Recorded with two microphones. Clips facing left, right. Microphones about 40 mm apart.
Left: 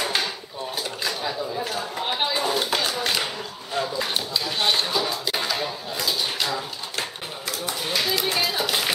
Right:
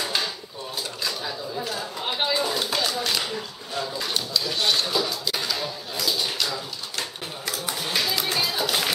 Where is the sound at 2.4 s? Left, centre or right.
Left.